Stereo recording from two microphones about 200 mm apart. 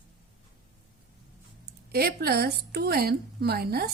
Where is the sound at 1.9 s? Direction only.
50° right (ahead or behind).